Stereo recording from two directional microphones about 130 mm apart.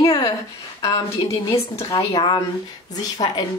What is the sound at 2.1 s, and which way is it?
Speech, 35° left (ahead or behind).